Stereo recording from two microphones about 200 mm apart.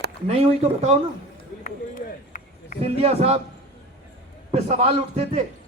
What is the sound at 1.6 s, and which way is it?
Run, 45° left (ahead or behind).